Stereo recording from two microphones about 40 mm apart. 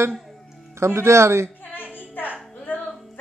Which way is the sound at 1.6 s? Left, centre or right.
Left.